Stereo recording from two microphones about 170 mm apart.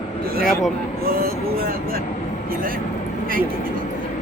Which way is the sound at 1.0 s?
60° right (ahead or behind).